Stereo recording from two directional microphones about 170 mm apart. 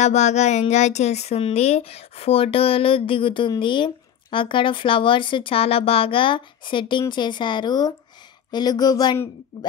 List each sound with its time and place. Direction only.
0.0 s a woman's voice: 40° left (ahead or behind); by 9.2 s 25° left (ahead or behind)